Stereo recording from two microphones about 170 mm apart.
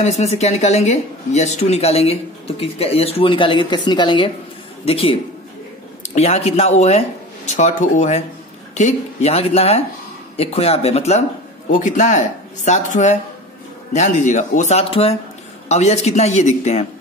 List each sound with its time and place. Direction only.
0.0 s speech: 40° left (ahead or behind)